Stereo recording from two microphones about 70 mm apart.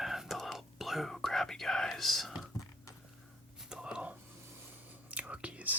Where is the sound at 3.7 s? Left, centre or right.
Centre.